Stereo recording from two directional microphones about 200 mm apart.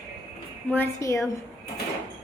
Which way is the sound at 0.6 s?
10° left (ahead or behind).